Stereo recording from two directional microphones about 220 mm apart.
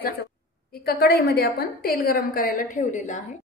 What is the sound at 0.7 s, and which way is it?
A woman's voice, 45° left (ahead or behind).